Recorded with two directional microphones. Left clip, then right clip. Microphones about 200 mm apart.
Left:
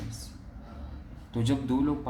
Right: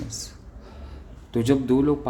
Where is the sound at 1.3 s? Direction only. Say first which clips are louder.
Right 8 dB; 45° right (ahead or behind).